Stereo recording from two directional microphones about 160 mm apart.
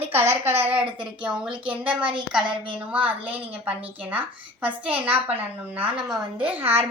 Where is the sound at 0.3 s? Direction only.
15° right (ahead or behind).